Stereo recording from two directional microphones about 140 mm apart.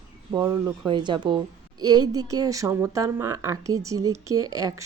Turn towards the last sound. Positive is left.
turn(degrees=-25)  # may be behind; listen again after turning